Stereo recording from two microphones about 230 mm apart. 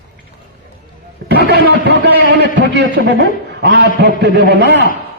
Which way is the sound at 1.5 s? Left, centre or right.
Right.